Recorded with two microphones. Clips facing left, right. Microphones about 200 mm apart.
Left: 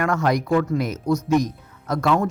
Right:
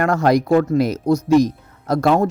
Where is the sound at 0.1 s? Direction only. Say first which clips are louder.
Right 5 dB; 35° right (ahead or behind).